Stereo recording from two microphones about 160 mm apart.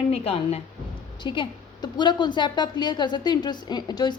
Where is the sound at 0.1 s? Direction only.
40° left (ahead or behind).